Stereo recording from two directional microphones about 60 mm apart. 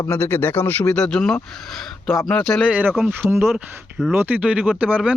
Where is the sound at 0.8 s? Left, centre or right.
Centre.